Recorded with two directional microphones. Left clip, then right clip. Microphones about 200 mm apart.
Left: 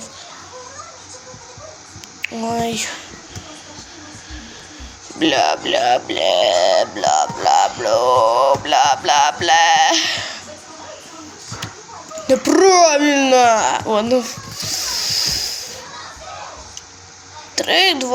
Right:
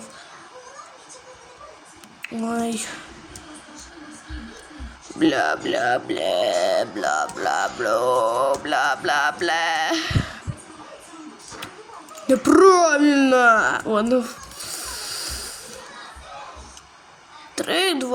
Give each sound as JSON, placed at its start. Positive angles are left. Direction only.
{"t": 2.2, "sound": "speech", "side_deg": -30}
{"t": 5.2, "sound": "speech", "side_deg": -30}
{"t": 9.0, "sound": "bleat", "side_deg": -30}
{"t": 12.3, "sound": "speech", "side_deg": -35}
{"t": 17.5, "sound": "speech", "side_deg": -35}